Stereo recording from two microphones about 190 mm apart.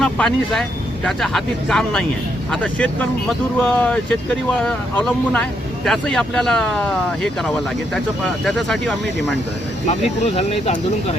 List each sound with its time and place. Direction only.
0.0 s speech: 5° left (ahead or behind)
9.8 s speech: 35° left (ahead or behind)